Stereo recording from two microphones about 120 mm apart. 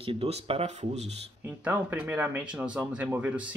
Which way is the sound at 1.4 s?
15° right (ahead or behind).